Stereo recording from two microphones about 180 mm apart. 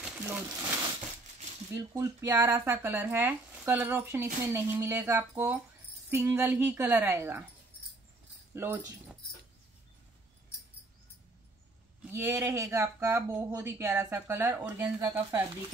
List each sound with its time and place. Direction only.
0.0 s a sound: 5° right (ahead or behind)
1.8 s speech: 20° right (ahead or behind)
8.5 s speech: 15° right (ahead or behind)
12.0 s speech: 15° right (ahead or behind)